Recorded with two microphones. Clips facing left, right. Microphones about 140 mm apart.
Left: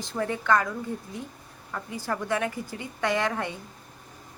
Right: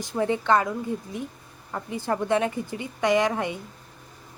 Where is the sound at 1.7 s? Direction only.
25° right (ahead or behind).